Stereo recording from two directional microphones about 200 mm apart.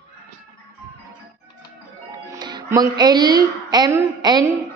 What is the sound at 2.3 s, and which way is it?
Music, 20° right (ahead or behind).